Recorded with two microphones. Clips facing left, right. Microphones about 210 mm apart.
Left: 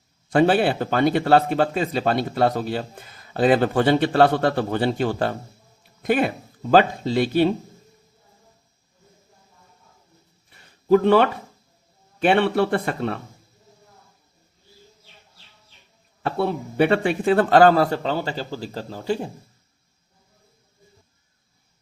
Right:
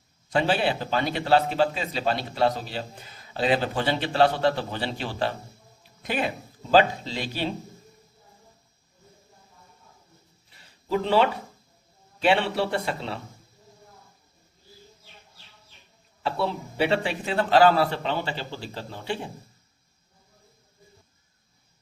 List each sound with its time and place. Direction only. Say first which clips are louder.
0.3 s speech: left 6 dB; 50° left (ahead or behind)
10.6 s a sound: left 10 dB; 55° left (ahead or behind)
12.2 s speech: left 5 dB; 55° left (ahead or behind)
16.2 s speech: left 4 dB; 55° left (ahead or behind)